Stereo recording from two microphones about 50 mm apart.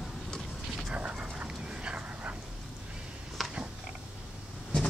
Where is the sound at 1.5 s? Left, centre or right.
Centre.